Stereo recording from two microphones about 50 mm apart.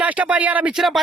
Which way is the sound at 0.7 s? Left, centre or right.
Centre.